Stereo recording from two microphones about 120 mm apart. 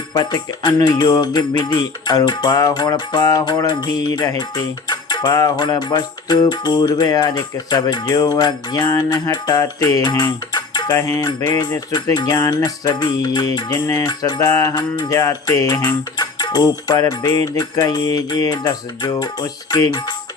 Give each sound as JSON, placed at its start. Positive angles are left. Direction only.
{"t": 0.1, "sound": "music", "side_deg": 35}